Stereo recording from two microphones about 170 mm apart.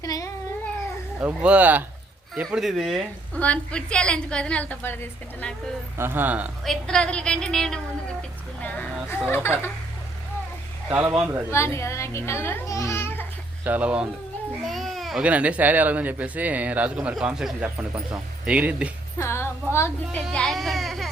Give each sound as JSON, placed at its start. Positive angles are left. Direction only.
{"t": 0.0, "sound": "cat", "side_deg": 20}
{"t": 1.2, "sound": "a woman's voice", "side_deg": -10}
{"t": 6.0, "sound": "speech", "side_deg": -10}
{"t": 6.7, "sound": "a woman's voice", "side_deg": 5}
{"t": 10.8, "sound": "speech", "side_deg": -5}
{"t": 11.5, "sound": "a child's voice", "side_deg": 15}
{"t": 13.7, "sound": "speech", "side_deg": -10}
{"t": 19.2, "sound": "music", "side_deg": 15}
{"t": 20.1, "sound": "a child's voice", "side_deg": 0}